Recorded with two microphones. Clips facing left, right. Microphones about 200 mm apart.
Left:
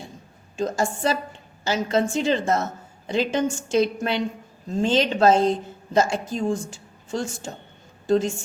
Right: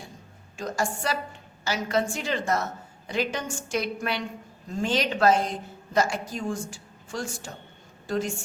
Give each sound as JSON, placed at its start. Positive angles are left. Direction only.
{"t": 0.5, "sound": "a woman's voice", "side_deg": 25}